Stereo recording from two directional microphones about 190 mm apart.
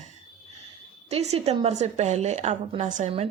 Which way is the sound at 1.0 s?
35° right (ahead or behind).